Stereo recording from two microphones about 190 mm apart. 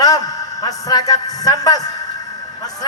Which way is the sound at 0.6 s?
20° left (ahead or behind).